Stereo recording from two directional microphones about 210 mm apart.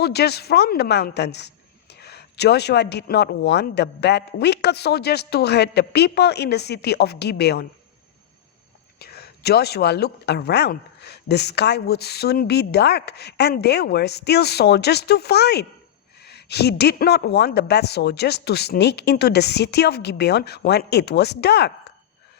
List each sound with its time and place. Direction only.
0.0 s a woman's voice: 50° left (ahead or behind)
9.0 s a woman's voice: 50° left (ahead or behind)